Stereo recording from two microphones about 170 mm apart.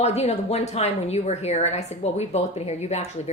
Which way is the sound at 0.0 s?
40° left (ahead or behind).